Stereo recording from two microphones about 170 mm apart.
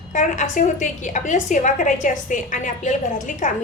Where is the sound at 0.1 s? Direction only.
50° left (ahead or behind).